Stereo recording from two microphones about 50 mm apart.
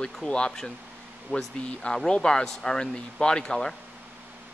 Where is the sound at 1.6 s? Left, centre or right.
Left.